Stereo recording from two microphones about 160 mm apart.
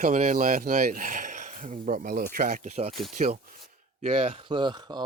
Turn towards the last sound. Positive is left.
turn(degrees=-30)  # may be behind; listen again after turning